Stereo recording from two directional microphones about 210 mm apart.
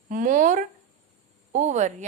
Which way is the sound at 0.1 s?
40° right (ahead or behind).